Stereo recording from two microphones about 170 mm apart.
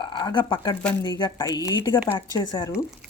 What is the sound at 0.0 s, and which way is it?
Speech, 25° left (ahead or behind).